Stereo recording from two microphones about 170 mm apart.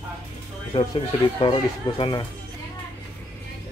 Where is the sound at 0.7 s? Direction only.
30° left (ahead or behind).